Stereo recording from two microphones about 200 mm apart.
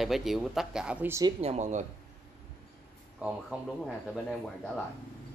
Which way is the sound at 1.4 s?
35° right (ahead or behind).